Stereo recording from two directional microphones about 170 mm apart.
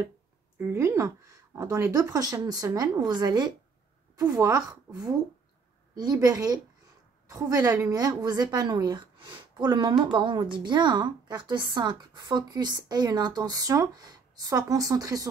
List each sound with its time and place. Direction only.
0.6 s a woman's voice: 15° right (ahead or behind)